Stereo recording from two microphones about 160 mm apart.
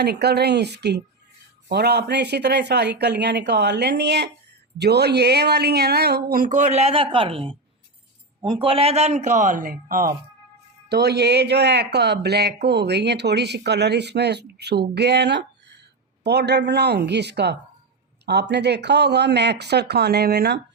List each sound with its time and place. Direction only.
0.0 s a man's voice: 90° right; by 10.2 s 60° right (ahead or behind)
10.8 s speech: 90° right